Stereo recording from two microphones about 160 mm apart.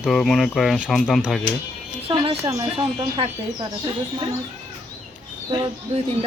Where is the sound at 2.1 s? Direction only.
30° right (ahead or behind).